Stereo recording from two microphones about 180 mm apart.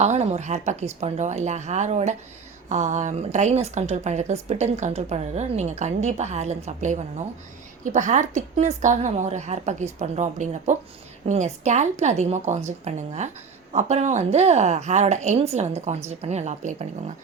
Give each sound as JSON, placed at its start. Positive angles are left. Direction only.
{"t": 0.0, "sound": "a woman's voice", "side_deg": -40}